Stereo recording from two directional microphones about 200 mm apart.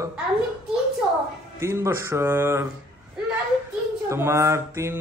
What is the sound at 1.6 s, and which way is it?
Speech, 15° right (ahead or behind).